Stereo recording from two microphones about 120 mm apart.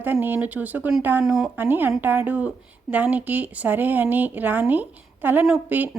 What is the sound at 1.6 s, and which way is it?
A woman's voice, 15° right (ahead or behind).